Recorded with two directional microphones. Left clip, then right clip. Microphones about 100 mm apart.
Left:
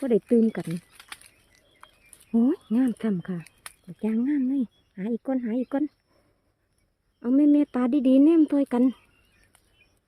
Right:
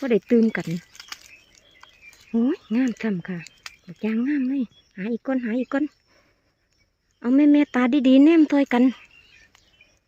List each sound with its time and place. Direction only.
0.3 s speech: 5° right (ahead or behind)
1.0 s typing: 5° right (ahead or behind)
2.3 s speech: 35° left (ahead or behind)
3.6 s a sound: 5° left (ahead or behind)
4.0 s speech: 15° left (ahead or behind)
4.9 s speech: 15° left (ahead or behind)
7.2 s speech: 5° right (ahead or behind)